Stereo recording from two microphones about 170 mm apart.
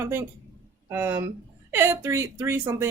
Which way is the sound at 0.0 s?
15° right (ahead or behind).